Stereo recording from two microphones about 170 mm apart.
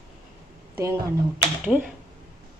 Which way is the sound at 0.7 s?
15° right (ahead or behind).